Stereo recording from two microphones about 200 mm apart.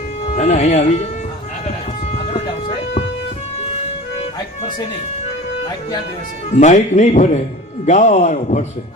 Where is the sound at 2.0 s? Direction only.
30° left (ahead or behind).